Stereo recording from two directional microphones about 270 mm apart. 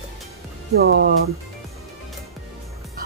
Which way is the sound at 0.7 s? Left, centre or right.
Right.